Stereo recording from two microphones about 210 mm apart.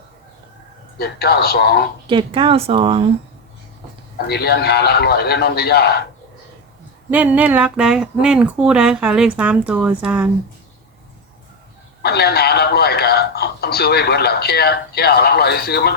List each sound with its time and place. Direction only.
0.9 s speech: 45° left (ahead or behind)
2.0 s speech: 25° right (ahead or behind)
4.3 s speech: 50° left (ahead or behind)
7.1 s speech: 5° right (ahead or behind)
12.0 s speech: 50° left (ahead or behind)